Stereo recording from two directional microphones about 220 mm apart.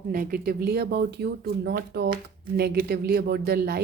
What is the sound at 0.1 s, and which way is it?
Speech, 40° right (ahead or behind).